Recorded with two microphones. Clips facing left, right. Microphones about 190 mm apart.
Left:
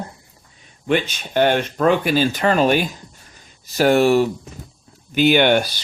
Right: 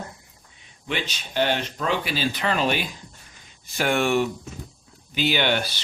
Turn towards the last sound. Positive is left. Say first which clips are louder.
# left 8 dB
turn(degrees=45)  # may be behind; listen again after turning